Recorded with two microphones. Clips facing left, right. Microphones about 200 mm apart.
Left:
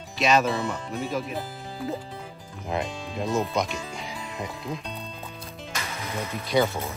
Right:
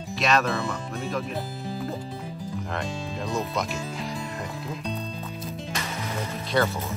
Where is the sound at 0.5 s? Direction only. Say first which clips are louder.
Left 1 dB; 20° left (ahead or behind).